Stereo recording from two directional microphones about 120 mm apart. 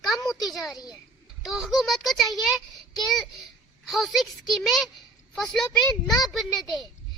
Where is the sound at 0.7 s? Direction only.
35° left (ahead or behind).